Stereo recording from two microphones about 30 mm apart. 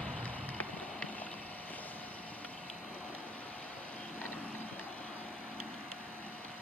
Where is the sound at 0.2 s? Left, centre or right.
Left.